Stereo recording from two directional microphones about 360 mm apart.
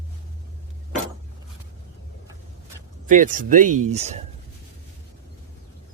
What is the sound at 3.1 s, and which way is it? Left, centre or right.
Speech, right.